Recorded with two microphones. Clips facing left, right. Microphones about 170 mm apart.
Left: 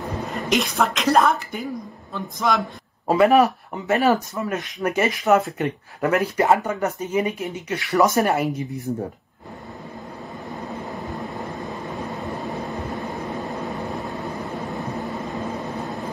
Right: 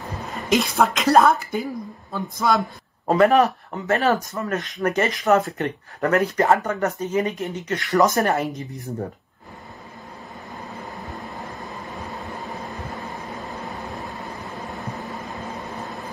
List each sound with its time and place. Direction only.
0.0 s a woman's voice: centre (ahead or behind)
7.1 s speech: 20° left (ahead or behind)
7.6 s speech: 5° left (ahead or behind)
8.9 s speech: centre (ahead or behind)
14.7 s vehicle: centre (ahead or behind)